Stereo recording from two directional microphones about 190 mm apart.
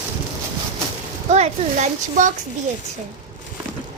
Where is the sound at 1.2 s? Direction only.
35° right (ahead or behind).